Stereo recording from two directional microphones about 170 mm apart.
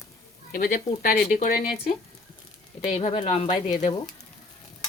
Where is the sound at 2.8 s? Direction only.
35° left (ahead or behind).